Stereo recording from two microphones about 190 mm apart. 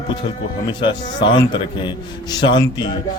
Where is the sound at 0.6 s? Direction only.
25° left (ahead or behind).